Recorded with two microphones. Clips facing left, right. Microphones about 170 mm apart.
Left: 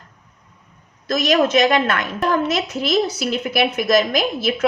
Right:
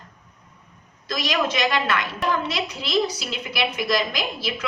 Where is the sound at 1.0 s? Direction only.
50° left (ahead or behind).